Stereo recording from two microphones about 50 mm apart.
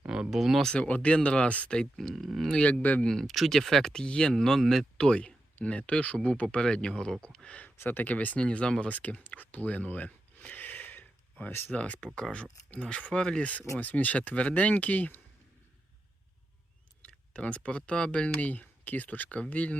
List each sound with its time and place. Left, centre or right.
0.1 s a sound: centre
0.3 s speech: centre
0.7 s speech: left
2.1 s speech: centre
4.9 s speech: centre
7.9 s speech: left
8.4 s speech: centre
8.9 s speech: left
9.2 s a sound: left
11.7 s speech: left
13.7 s speech: left
17.0 s speech: left